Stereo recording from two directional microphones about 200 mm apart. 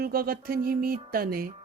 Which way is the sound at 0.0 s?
50° right (ahead or behind).